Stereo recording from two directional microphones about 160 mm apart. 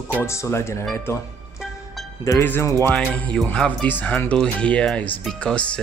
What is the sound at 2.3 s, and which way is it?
Speech, 15° left (ahead or behind).